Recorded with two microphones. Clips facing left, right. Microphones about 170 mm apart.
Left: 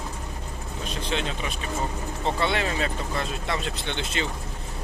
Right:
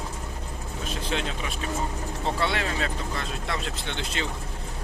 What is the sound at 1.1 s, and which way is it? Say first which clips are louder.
Speech: left 1 dB; 5° right (ahead or behind).